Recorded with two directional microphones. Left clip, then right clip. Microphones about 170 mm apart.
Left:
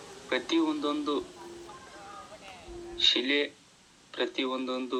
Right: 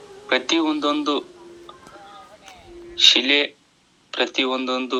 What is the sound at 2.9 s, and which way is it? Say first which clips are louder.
A man's voice: right 10 dB; 75° right (ahead or behind).